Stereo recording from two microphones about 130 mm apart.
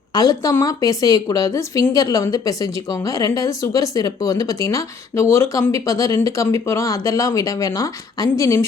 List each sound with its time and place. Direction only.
0.1 s a woman's voice: 30° left (ahead or behind)